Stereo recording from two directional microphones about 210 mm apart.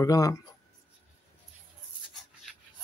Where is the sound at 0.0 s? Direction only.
15° left (ahead or behind).